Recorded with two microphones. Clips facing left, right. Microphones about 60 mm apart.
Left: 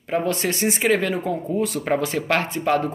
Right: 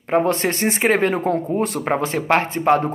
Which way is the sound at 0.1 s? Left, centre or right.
Right.